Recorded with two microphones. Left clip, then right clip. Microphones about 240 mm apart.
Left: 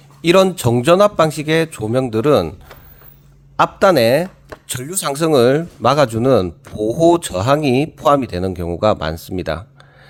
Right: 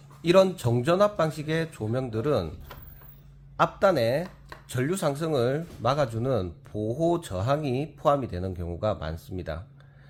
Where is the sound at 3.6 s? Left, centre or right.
Left.